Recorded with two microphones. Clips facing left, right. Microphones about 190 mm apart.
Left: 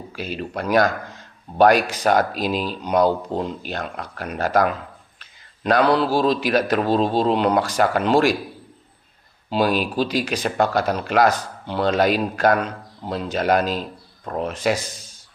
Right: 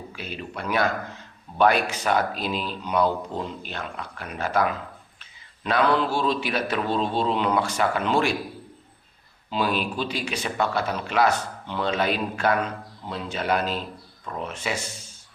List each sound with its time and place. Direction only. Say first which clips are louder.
0.2 s a man's voice: left 7 dB; 40° left (ahead or behind)
9.5 s a man's voice: left 5 dB; 40° left (ahead or behind)